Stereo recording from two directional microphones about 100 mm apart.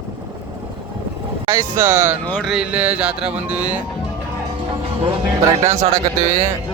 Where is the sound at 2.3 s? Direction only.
5° right (ahead or behind).